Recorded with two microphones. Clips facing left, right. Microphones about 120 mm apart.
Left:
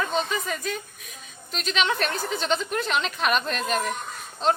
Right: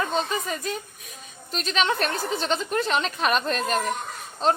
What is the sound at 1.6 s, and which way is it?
A woman's voice, 40° right (ahead or behind).